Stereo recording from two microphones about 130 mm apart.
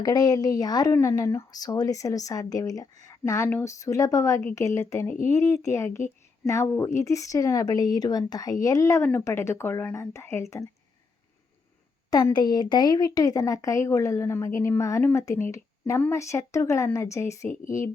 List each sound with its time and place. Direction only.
0.0 s speech: 30° left (ahead or behind)
12.1 s speech: 30° left (ahead or behind)